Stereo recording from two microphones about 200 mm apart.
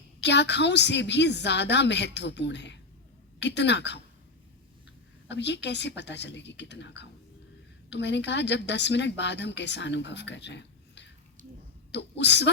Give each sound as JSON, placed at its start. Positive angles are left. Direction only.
{"t": 0.2, "sound": "a woman's voice", "side_deg": 60}
{"t": 5.3, "sound": "a woman's voice", "side_deg": 60}